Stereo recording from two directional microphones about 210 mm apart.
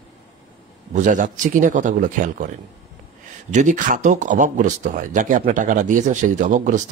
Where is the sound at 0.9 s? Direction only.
35° right (ahead or behind).